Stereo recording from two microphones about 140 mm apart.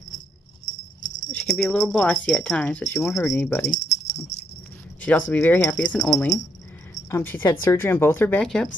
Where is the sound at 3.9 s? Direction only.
50° left (ahead or behind).